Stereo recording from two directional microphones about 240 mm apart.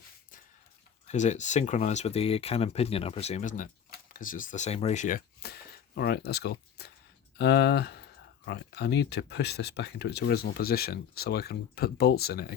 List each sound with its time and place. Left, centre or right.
1.0 s speech: left